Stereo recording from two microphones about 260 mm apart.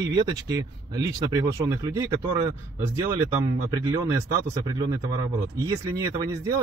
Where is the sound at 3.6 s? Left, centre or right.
Centre.